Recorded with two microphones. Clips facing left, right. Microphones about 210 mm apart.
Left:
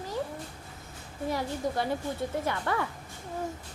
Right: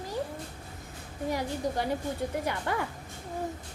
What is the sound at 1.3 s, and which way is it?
A woman's voice, 15° right (ahead or behind).